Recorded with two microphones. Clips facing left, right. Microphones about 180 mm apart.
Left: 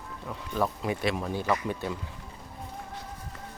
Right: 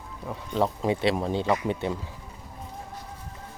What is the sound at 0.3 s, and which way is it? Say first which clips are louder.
Speech: right 3 dB; 20° right (ahead or behind).